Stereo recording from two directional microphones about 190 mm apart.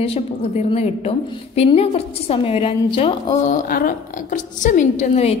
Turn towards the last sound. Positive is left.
turn(degrees=35)  # may be behind; listen again after turning